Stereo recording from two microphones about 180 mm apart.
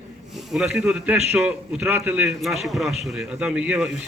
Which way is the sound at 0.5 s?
Centre (ahead or behind).